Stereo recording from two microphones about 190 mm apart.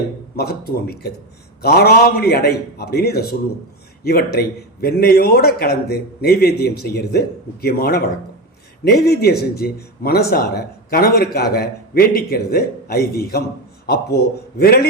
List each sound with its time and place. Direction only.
0.3 s a man's voice: 55° left (ahead or behind)